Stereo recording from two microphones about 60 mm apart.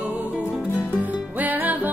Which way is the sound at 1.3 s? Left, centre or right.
Right.